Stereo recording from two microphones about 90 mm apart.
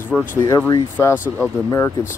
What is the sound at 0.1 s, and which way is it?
Speech, 15° left (ahead or behind).